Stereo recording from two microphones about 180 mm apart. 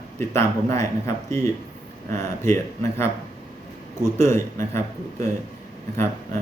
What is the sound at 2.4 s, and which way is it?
A man's voice, 15° left (ahead or behind).